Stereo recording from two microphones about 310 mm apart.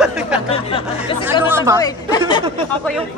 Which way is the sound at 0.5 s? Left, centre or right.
Centre.